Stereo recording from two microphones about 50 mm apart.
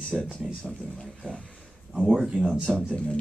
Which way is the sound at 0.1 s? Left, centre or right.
Centre.